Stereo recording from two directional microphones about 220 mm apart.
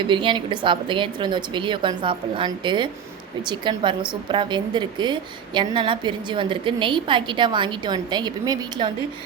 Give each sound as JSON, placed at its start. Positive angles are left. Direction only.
{"t": 0.0, "sound": "a woman's voice", "side_deg": -20}